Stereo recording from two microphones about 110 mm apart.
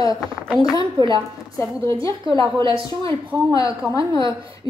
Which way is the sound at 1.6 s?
25° left (ahead or behind).